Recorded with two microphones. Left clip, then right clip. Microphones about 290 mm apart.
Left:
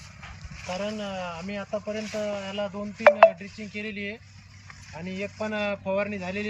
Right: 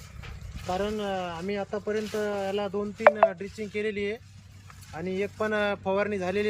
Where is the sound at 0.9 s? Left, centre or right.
Centre.